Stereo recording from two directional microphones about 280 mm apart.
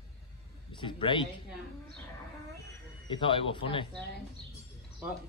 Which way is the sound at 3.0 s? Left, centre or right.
Centre.